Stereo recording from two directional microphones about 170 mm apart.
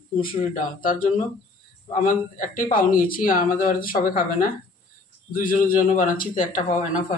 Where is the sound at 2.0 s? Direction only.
50° left (ahead or behind).